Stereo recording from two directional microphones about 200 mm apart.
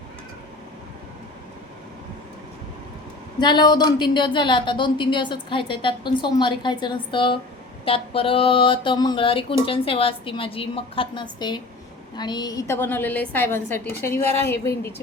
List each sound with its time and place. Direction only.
3.4 s a woman's voice: 20° left (ahead or behind)